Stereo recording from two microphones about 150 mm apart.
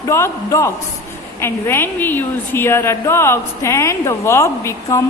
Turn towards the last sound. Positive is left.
turn(degrees=20)  # may be behind; listen again after turning